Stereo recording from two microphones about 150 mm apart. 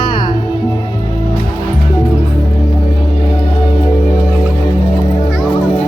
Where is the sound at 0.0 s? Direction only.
30° left (ahead or behind).